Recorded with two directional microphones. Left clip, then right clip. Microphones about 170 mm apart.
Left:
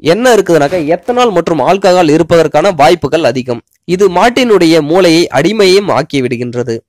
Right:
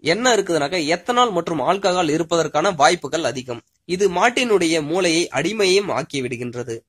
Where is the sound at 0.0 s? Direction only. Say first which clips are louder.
Left 10 dB; 45° left (ahead or behind).